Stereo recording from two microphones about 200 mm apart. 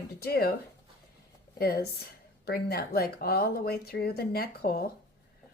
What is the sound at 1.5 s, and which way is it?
Speech, 50° left (ahead or behind).